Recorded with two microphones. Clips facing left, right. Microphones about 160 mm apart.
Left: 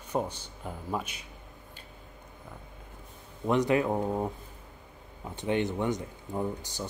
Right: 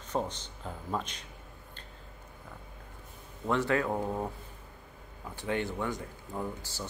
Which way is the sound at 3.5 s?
20° left (ahead or behind).